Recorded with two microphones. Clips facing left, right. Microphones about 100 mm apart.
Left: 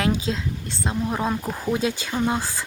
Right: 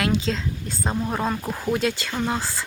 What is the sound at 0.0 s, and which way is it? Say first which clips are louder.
Speech: even; 10° left (ahead or behind).